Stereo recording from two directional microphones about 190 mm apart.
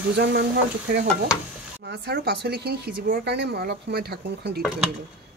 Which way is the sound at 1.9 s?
60° right (ahead or behind).